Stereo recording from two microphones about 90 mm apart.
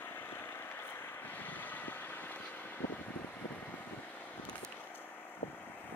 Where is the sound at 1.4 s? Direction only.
20° left (ahead or behind).